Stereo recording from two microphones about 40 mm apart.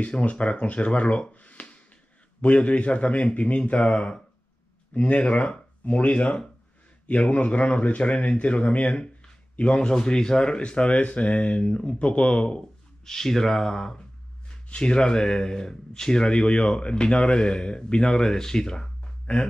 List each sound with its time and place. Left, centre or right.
0.0 s speech: left
1.3 s a sound: left
2.4 s speech: left
13.0 s speech: centre